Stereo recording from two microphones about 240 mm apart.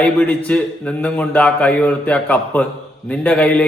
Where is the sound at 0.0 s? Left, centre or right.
Centre.